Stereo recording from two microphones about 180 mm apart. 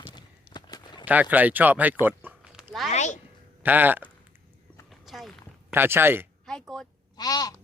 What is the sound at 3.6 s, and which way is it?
Speech, 10° right (ahead or behind).